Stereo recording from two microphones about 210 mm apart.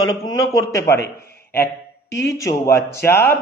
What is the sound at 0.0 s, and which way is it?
A man's voice, 20° left (ahead or behind).